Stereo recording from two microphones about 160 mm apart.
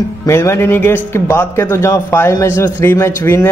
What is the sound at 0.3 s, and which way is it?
Speech, 15° left (ahead or behind).